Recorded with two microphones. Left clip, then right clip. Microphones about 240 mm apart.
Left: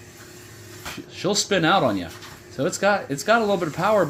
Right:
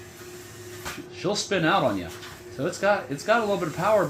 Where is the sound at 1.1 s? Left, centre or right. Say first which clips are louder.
Left 4 dB; left.